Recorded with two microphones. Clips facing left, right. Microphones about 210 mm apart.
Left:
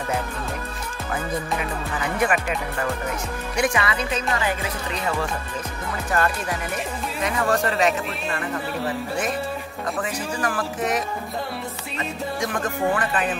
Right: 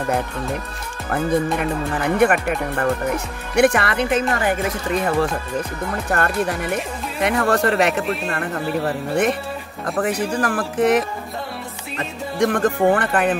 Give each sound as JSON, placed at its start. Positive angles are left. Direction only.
{"t": 1.6, "sound": "speech", "side_deg": -60}
{"t": 12.4, "sound": "speech", "side_deg": -65}